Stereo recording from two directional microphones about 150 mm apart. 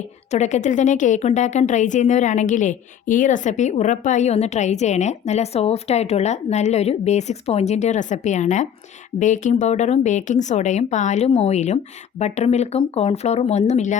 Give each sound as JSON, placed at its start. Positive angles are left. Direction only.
{"t": 0.3, "sound": "a woman's voice", "side_deg": 50}